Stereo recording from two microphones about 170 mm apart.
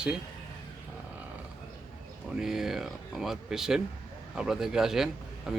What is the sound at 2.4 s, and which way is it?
Speech, centre (ahead or behind).